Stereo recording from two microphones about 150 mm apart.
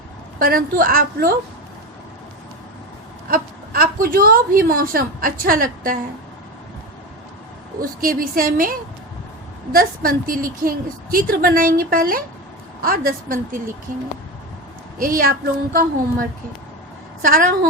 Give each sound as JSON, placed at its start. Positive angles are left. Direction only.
{"t": 0.3, "sound": "a woman's voice", "side_deg": -70}
{"t": 3.2, "sound": "a woman's voice", "side_deg": -75}
{"t": 7.8, "sound": "a woman's voice", "side_deg": -70}
{"t": 14.9, "sound": "a woman's voice", "side_deg": -70}
{"t": 17.2, "sound": "a woman's voice", "side_deg": -65}